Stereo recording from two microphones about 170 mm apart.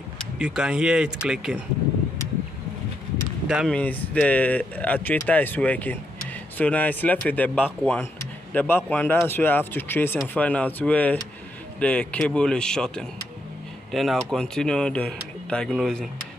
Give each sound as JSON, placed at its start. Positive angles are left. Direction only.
{"t": 0.4, "sound": "speech", "side_deg": -5}
{"t": 3.4, "sound": "speech", "side_deg": -5}
{"t": 3.7, "sound": "speech", "side_deg": 10}